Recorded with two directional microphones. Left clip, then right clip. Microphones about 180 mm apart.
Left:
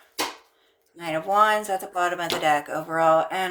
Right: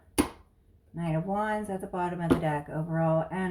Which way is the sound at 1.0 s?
45° left (ahead or behind).